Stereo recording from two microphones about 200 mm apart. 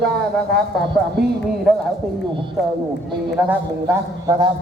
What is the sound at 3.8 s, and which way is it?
Speech, 20° right (ahead or behind).